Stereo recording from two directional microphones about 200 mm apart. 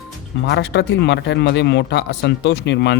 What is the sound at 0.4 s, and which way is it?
Speech, 60° left (ahead or behind).